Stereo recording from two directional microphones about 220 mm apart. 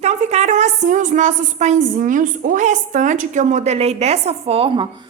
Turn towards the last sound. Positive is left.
turn(degrees=-20)  # may be behind; listen again after turning